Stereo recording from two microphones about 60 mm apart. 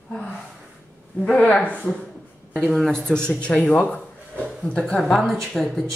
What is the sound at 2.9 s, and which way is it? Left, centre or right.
A woman's voice, centre.